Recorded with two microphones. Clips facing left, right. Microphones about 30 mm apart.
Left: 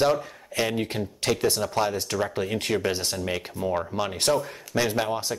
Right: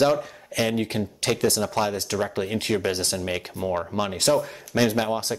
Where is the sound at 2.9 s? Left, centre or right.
Right.